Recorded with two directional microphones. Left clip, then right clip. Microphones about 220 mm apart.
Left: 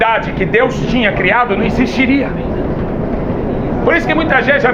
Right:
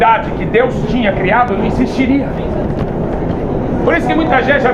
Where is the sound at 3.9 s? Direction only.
25° left (ahead or behind).